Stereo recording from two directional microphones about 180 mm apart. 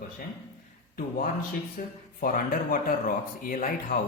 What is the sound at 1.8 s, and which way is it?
Speech, 50° left (ahead or behind).